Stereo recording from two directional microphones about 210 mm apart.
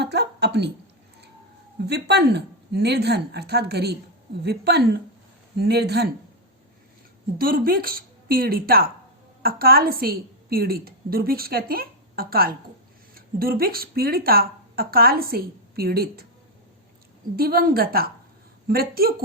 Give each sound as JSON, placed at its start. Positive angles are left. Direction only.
{"t": 0.0, "sound": "a sound", "side_deg": -50}
{"t": 1.9, "sound": "speech", "side_deg": -50}
{"t": 7.3, "sound": "a woman's voice", "side_deg": -45}
{"t": 17.3, "sound": "speech", "side_deg": -45}